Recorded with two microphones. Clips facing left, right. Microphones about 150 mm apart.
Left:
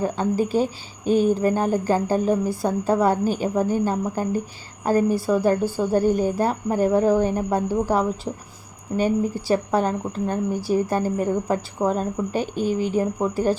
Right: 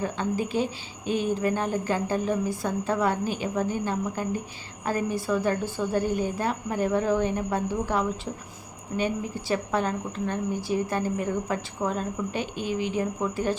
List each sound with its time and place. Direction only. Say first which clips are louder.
0.0 s a woman's voice: left 6 dB; 40° left (ahead or behind)